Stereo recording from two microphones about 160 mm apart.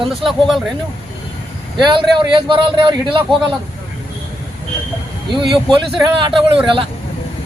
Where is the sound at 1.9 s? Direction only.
30° right (ahead or behind).